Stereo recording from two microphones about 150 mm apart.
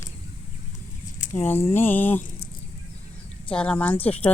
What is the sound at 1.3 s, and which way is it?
Speech, 15° left (ahead or behind).